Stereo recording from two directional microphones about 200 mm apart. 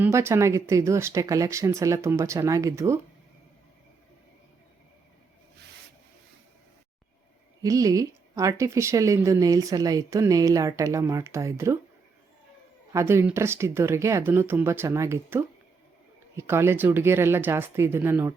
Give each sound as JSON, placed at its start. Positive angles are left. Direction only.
{"t": 0.0, "sound": "speech", "side_deg": -15}
{"t": 7.6, "sound": "speech", "side_deg": -15}
{"t": 12.9, "sound": "speech", "side_deg": -15}